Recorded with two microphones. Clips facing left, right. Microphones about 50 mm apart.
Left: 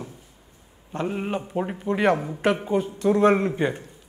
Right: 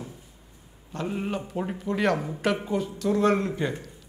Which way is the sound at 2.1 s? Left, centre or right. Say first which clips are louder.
Left 2 dB; centre.